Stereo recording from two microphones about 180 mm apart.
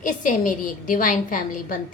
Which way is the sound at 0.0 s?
45° left (ahead or behind).